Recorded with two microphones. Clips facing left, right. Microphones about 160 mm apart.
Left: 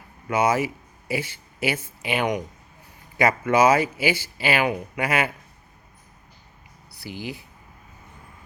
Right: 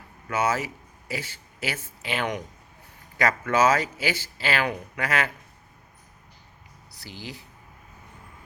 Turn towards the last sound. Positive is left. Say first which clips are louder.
# left 6 dB
turn(degrees=15)  # may be behind; listen again after turning